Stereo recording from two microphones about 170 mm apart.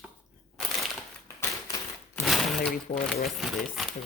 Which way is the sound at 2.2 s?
Centre (ahead or behind).